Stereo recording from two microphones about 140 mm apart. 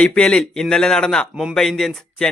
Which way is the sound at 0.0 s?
5° left (ahead or behind).